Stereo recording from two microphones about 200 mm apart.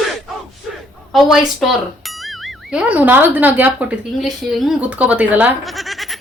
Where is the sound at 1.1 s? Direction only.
Centre (ahead or behind).